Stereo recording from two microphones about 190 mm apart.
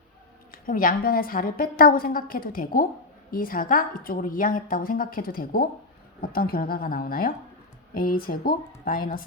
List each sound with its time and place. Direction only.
0.5 s a woman's voice: 45° left (ahead or behind)